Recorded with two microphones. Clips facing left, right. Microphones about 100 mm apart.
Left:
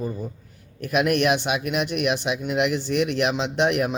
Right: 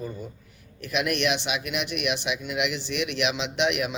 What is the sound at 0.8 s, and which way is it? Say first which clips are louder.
Speech: left 6 dB; 45° left (ahead or behind).